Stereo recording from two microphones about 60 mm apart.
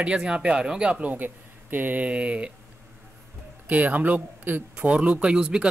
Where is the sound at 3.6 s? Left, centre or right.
Right.